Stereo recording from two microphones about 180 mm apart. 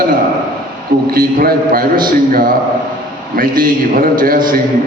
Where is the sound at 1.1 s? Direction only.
55° right (ahead or behind).